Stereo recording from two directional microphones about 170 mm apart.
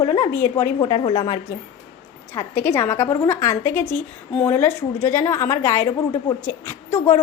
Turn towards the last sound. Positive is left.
turn(degrees=15)  # may be behind; listen again after turning